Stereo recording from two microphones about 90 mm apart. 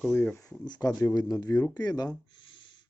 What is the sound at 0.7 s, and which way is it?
A man's voice, 50° left (ahead or behind).